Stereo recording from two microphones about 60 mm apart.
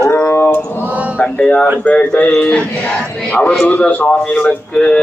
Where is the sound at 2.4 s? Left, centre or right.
Centre.